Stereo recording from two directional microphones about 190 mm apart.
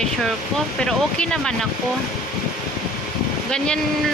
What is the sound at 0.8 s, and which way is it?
Speech, 5° left (ahead or behind).